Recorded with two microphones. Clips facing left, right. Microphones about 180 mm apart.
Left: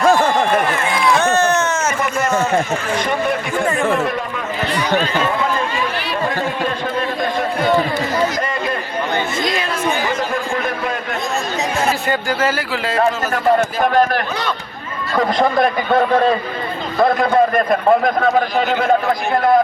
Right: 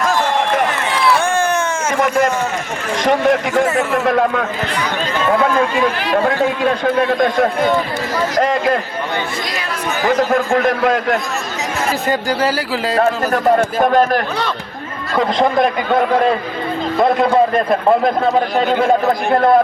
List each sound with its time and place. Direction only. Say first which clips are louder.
1.1 s a sound: left 3 dB; 10° right (ahead or behind)
3.0 s a man's voice: right 5 dB; 90° right
8.4 s speech: right 6 dB; 90° right
10.5 s a man's voice: right 7 dB; 90° right
12.0 s speech: right 2 dB; 35° right (ahead or behind)
15.4 s a man's voice: right 1 dB; 15° right (ahead or behind)
17.7 s speech: right 1 dB; 30° right (ahead or behind)